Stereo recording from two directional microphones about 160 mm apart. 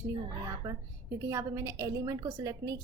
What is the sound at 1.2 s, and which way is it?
A woman's voice, 15° right (ahead or behind).